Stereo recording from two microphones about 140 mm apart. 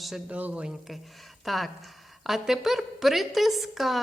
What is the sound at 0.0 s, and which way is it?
A woman's voice, 5° right (ahead or behind).